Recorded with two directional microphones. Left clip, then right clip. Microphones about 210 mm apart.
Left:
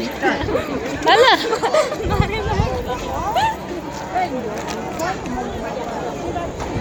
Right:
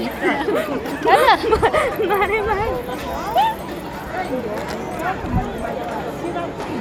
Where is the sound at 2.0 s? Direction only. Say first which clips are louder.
Right 4 dB; 25° right (ahead or behind).